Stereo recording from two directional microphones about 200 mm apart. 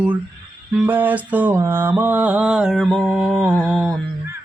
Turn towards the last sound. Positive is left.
turn(degrees=-5)  # may be behind; listen again after turning